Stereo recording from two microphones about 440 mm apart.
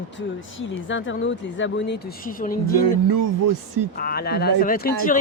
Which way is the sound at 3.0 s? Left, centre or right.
Right.